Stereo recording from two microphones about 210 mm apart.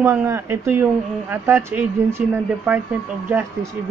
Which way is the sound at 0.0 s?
10° right (ahead or behind).